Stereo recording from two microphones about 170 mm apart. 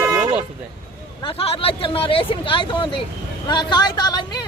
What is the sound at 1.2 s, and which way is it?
Speech, 35° left (ahead or behind).